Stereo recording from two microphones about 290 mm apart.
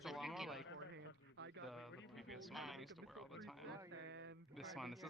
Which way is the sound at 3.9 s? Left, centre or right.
Right.